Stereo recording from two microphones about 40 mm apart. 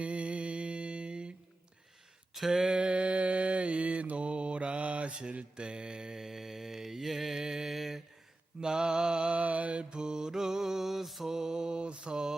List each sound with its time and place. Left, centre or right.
0.0 s humming: right
2.3 s a sound: centre
2.6 s mantra: right; by 8.0 s centre
8.6 s mantra: centre
9.4 s mantra: right
9.9 s mantra: centre
11.3 s mantra: centre